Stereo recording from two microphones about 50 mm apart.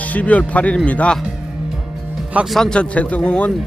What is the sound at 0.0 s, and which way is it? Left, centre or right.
A man's voice, left.